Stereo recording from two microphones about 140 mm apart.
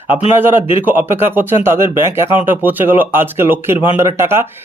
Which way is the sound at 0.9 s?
15° right (ahead or behind).